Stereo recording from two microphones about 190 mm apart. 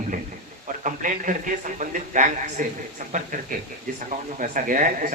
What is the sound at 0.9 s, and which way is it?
Speech, 40° right (ahead or behind).